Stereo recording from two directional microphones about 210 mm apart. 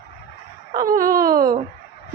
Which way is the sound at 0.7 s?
40° right (ahead or behind).